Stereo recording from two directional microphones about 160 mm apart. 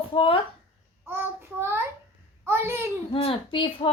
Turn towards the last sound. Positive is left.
turn(degrees=30)  # may be behind; listen again after turning